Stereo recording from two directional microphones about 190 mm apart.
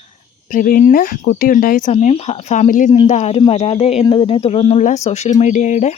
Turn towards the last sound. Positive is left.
turn(degrees=35)  # may be behind; listen again after turning